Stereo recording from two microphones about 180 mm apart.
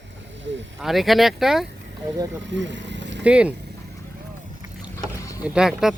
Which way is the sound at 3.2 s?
5° right (ahead or behind).